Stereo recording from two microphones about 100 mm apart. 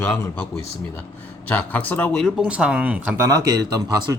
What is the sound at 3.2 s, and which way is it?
Speech, 35° right (ahead or behind).